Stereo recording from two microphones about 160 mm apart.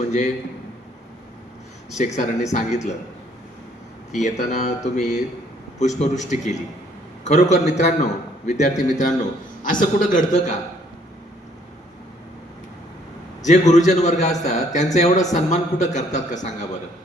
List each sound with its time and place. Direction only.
1.9 s a man's voice: 45° left (ahead or behind)
4.1 s a man's voice: 45° left (ahead or behind)
13.4 s a man's voice: 50° left (ahead or behind)